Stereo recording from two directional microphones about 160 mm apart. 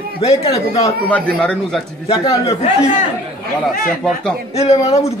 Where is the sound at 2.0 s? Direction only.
35° left (ahead or behind).